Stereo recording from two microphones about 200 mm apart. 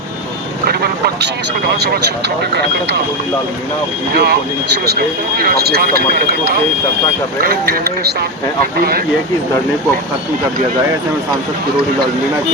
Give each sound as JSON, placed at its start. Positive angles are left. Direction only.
{"t": 0.7, "sound": "speech", "side_deg": -50}
{"t": 4.1, "sound": "speech", "side_deg": -50}